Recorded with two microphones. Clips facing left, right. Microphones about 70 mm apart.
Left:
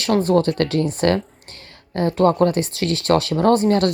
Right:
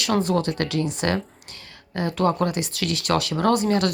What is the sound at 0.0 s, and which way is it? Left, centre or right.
Speech, left.